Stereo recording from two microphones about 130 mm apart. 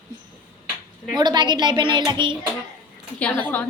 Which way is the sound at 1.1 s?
35° right (ahead or behind).